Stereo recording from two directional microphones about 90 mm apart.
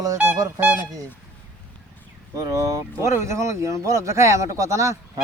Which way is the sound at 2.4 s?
40° right (ahead or behind).